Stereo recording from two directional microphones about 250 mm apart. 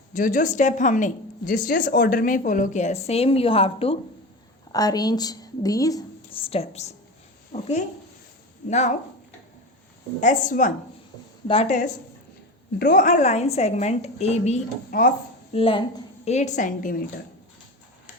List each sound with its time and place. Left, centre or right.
0.1 s a woman's voice: left
10.2 s speech: left
15.5 s speech: left